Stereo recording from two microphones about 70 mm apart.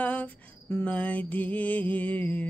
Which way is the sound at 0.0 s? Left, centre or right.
Left.